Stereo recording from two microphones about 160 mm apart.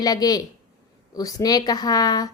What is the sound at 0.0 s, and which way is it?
A woman's voice, 25° left (ahead or behind).